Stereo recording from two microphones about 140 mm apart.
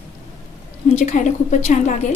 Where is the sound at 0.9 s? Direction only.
55° left (ahead or behind).